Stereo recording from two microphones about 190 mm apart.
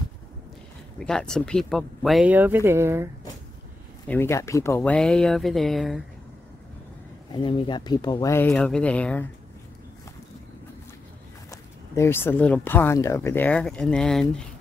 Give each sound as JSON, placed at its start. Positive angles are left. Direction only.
{"t": 0.9, "sound": "speech", "side_deg": 5}
{"t": 4.1, "sound": "speech", "side_deg": 15}
{"t": 7.3, "sound": "speech", "side_deg": 25}
{"t": 11.9, "sound": "speech", "side_deg": 15}